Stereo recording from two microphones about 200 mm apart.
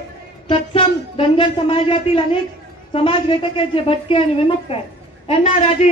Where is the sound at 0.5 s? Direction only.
25° left (ahead or behind).